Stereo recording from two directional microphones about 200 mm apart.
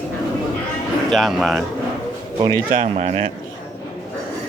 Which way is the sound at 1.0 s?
Centre (ahead or behind).